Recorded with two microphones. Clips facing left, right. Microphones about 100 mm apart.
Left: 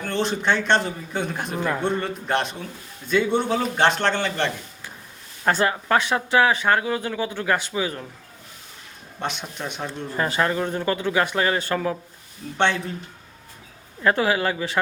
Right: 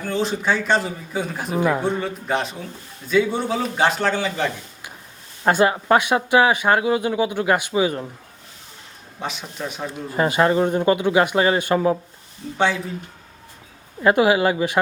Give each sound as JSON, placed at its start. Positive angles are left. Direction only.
{"t": 0.0, "sound": "a man's voice", "side_deg": -5}
{"t": 5.5, "sound": "speech", "side_deg": -15}
{"t": 9.2, "sound": "a man's voice", "side_deg": 0}
{"t": 10.1, "sound": "speech", "side_deg": -15}
{"t": 12.5, "sound": "a man's voice", "side_deg": -5}
{"t": 14.0, "sound": "speech", "side_deg": -15}